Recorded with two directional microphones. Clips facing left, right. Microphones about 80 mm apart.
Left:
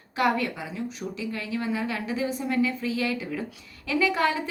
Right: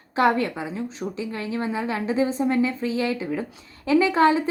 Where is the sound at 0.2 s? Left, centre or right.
Right.